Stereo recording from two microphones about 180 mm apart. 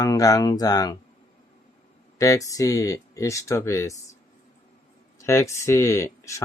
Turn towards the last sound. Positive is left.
turn(degrees=15)  # may be behind; listen again after turning